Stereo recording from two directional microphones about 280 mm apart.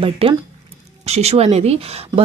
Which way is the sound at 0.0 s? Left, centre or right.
Centre.